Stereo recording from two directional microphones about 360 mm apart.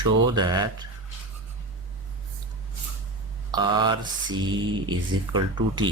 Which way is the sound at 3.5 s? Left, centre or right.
Centre.